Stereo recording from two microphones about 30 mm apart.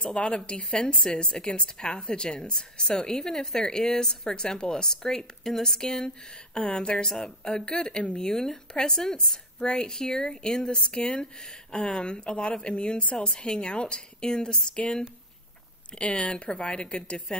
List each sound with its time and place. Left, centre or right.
0.0 s a woman's voice: left
3.1 s a woman's voice: centre
6.6 s a woman's voice: left
8.2 s a woman's voice: centre
15.9 s a woman's voice: left